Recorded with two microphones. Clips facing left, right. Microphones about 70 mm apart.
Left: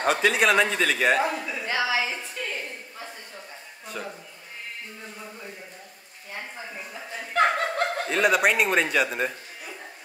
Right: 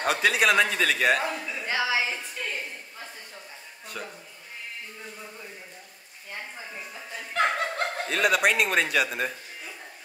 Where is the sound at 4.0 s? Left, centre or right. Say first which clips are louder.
Left 3 dB; centre.